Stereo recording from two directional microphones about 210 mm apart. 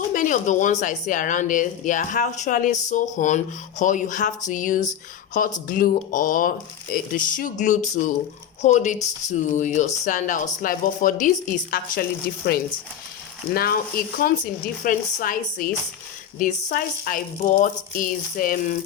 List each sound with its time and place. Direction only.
0.1 s a woman's voice: 35° left (ahead or behind)
13.5 s a woman's voice: 45° left (ahead or behind)